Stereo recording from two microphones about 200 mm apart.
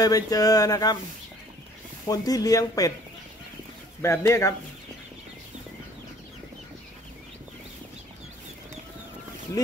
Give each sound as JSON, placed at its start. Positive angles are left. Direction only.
{"t": 0.0, "sound": "speech", "side_deg": 20}
{"t": 2.0, "sound": "speech", "side_deg": 20}
{"t": 4.0, "sound": "speech", "side_deg": 15}